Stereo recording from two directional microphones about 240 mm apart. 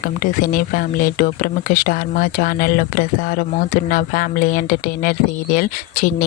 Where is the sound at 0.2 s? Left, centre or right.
Left.